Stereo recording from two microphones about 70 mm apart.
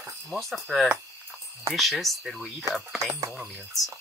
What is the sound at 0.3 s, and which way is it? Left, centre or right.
Speech, centre.